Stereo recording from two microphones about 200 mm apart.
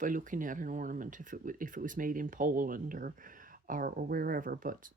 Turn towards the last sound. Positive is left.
turn(degrees=-45)  # may be behind; listen again after turning